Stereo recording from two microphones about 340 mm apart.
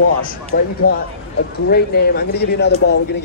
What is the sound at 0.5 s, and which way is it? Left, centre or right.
Speech, left.